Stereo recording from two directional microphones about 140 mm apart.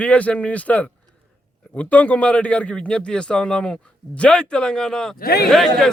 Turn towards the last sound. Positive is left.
turn(degrees=5)  # may be behind; listen again after turning